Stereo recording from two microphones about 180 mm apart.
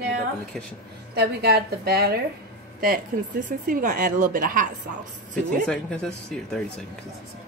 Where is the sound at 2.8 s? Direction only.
50° right (ahead or behind).